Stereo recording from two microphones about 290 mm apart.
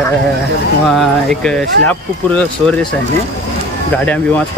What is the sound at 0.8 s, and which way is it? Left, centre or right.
Speech, centre.